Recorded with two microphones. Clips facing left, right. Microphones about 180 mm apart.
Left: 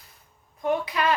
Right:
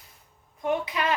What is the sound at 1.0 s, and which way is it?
Speech, 20° right (ahead or behind).